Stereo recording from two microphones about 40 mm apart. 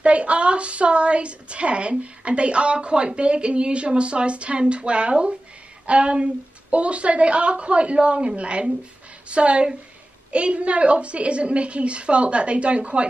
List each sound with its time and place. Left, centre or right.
0.0 s a woman's voice: right